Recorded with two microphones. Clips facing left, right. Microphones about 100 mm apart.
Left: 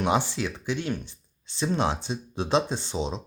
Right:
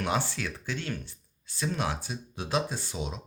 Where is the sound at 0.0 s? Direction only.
20° left (ahead or behind).